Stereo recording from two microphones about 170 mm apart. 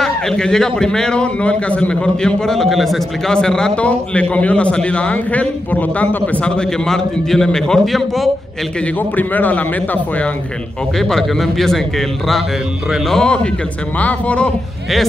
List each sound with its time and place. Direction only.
0.0 s a man's voice: 5° left (ahead or behind)
11.0 s a man's voice: centre (ahead or behind)
12.9 s a man's voice: 5° left (ahead or behind)